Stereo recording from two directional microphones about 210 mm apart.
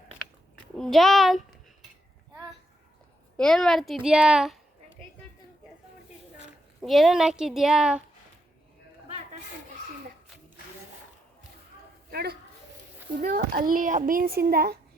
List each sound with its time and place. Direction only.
0.8 s speech: centre (ahead or behind)
3.3 s speech: centre (ahead or behind)
6.8 s speech: centre (ahead or behind)
12.1 s a child's voice: 50° right (ahead or behind)